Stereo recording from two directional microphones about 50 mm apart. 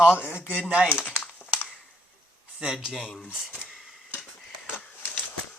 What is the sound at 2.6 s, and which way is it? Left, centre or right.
Speech, centre.